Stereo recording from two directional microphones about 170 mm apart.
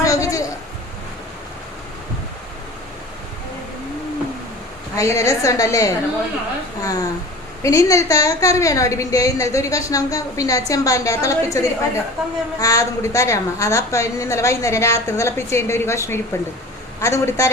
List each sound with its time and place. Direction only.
0.0 s a sound: 20° left (ahead or behind)
4.9 s a woman's voice: 20° left (ahead or behind)
12.2 s a woman's voice: centre (ahead or behind)
12.5 s a woman's voice: 20° left (ahead or behind)